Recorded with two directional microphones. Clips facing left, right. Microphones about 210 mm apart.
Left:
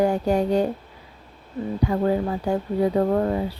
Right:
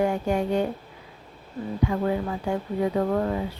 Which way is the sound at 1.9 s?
35° left (ahead or behind).